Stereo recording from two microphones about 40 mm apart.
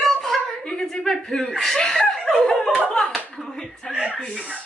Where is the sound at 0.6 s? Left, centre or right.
Centre.